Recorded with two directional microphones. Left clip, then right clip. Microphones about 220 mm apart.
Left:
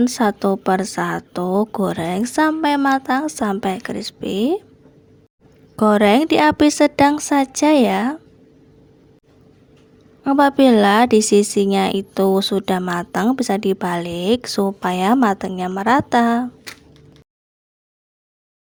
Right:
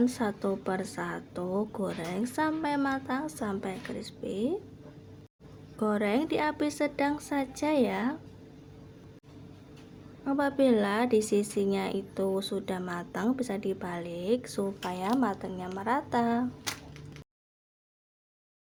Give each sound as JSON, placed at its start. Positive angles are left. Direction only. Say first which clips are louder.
{"t": 0.0, "sound": "speech", "louder": "left 12 dB", "side_deg": 40}
{"t": 5.7, "sound": "speech", "louder": "left 15 dB", "side_deg": 45}
{"t": 10.2, "sound": "speech", "louder": "left 13 dB", "side_deg": 45}